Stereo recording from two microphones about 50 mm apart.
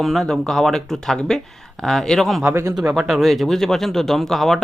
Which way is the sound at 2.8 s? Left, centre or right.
Centre.